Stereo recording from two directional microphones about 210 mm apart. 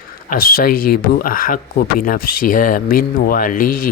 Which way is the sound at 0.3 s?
45° left (ahead or behind).